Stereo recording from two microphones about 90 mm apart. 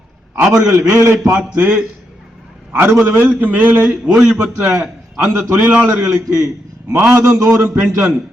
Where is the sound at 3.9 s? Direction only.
10° right (ahead or behind).